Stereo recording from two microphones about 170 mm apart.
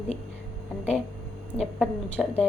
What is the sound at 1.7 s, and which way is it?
Speech, centre (ahead or behind).